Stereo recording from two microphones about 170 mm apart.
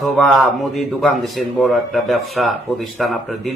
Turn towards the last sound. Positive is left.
turn(degrees=0)  # may be behind; listen again after turning